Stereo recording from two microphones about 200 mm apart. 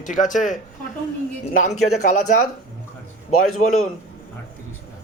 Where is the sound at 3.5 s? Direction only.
90° left.